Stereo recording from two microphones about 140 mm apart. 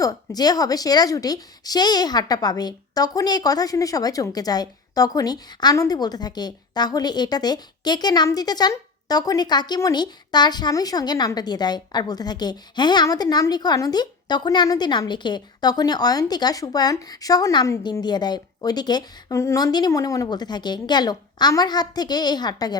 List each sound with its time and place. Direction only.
0.0 s a woman's voice: 25° left (ahead or behind)